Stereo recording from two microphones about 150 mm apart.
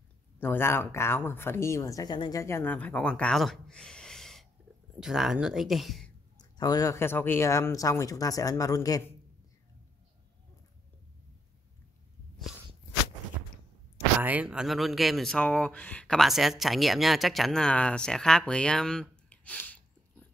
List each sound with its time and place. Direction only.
0.4 s speech: 15° left (ahead or behind)
2.4 s speech: 15° left (ahead or behind); by 6.1 s centre (ahead or behind)
6.3 s speech: 25° left (ahead or behind)
14.2 s speech: 10° right (ahead or behind); by 20.2 s 10° left (ahead or behind)